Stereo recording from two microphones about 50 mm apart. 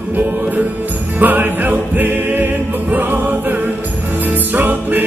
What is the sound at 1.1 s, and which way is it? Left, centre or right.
Music, right.